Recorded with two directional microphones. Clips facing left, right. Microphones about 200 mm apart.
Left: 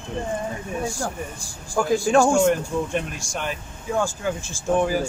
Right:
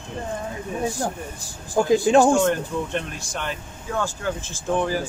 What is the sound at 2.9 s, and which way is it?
Speech, 10° left (ahead or behind).